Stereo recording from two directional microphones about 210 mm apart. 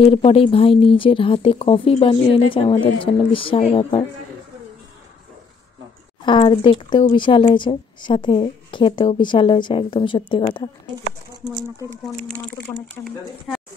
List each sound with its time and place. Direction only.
0.0 s speech: 30° left (ahead or behind)
6.2 s speech: 25° left (ahead or behind)
12.3 s speech: 10° left (ahead or behind)